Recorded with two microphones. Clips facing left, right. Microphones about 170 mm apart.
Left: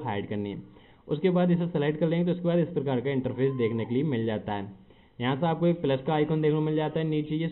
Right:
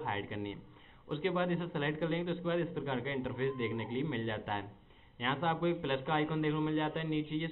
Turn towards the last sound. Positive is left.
turn(degrees=20)  # may be behind; listen again after turning